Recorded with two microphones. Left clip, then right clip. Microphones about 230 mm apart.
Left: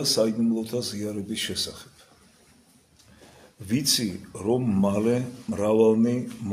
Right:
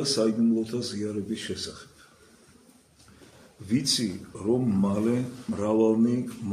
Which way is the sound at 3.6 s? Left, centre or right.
Left.